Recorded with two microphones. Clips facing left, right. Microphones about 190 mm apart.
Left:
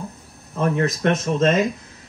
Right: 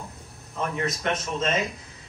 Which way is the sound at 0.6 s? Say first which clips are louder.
Left 8 dB; 55° left (ahead or behind).